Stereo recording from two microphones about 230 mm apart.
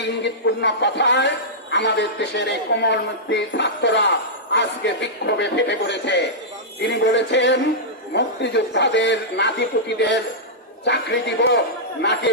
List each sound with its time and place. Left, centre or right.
0.2 s a woman's voice: left